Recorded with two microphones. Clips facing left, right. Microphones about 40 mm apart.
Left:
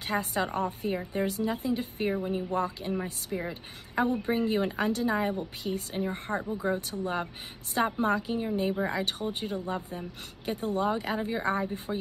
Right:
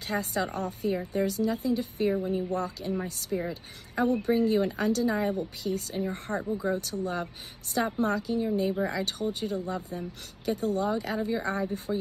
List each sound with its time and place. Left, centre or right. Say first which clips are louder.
0.0 s speech: even; left
6.0 s speech: even; left